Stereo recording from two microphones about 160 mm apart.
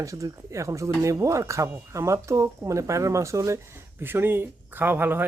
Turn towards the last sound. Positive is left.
turn(degrees=-10)  # may be behind; listen again after turning